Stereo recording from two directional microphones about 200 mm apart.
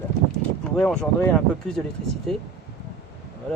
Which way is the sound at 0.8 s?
Centre (ahead or behind).